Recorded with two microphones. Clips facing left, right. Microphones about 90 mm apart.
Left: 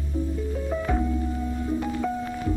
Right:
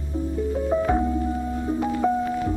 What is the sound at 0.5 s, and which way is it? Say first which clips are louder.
Music: right 6 dB; 25° right (ahead or behind).